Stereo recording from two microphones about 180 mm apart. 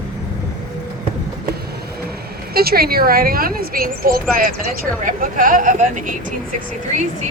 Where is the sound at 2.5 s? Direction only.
60° right (ahead or behind).